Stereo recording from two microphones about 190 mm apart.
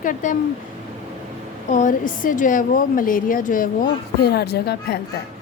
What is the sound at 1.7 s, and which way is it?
Speech, 45° left (ahead or behind).